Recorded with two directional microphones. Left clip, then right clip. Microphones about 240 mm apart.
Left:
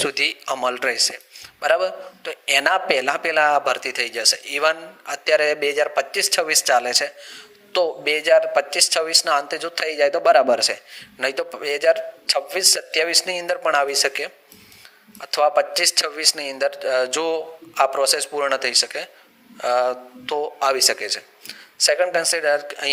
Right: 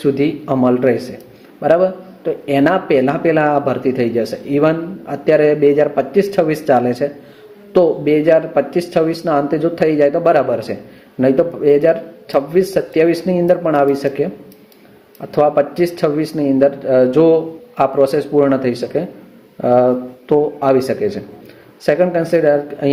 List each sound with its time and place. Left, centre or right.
0.0 s a man's voice: left